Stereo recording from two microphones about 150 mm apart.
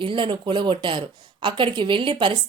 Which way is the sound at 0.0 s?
35° right (ahead or behind).